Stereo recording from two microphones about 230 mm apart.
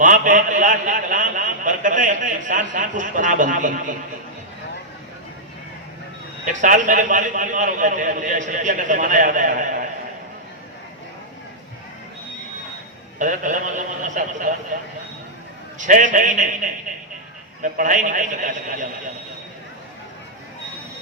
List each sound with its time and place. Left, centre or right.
0.0 s a man's voice: right
6.4 s a man's voice: right
13.1 s a man's voice: right
15.8 s a man's voice: right